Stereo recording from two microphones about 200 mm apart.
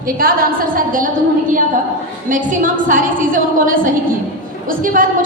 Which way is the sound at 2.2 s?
40° right (ahead or behind).